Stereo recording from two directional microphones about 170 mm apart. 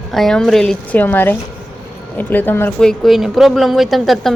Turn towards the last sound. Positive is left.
turn(degrees=0)  # may be behind; listen again after turning